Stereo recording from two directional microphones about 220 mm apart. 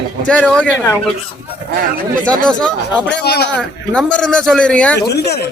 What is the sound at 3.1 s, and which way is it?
Speech, 45° left (ahead or behind).